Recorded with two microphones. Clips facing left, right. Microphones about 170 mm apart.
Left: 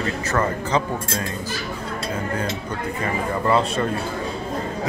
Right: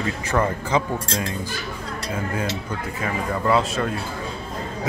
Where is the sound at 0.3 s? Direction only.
10° right (ahead or behind).